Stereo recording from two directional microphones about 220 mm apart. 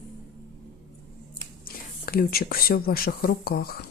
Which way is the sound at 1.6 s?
40° left (ahead or behind).